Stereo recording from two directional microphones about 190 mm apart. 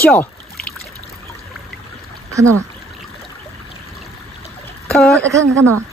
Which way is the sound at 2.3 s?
15° right (ahead or behind).